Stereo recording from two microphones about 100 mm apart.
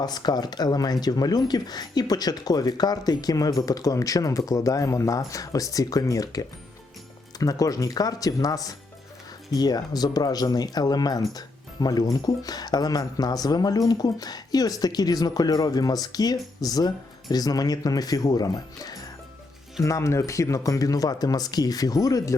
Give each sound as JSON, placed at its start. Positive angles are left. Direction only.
{"t": 0.0, "sound": "speech", "side_deg": 45}